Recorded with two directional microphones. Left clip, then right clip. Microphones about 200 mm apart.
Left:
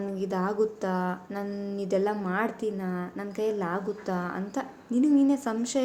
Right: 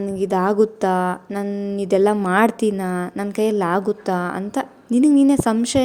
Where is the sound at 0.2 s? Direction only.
40° right (ahead or behind).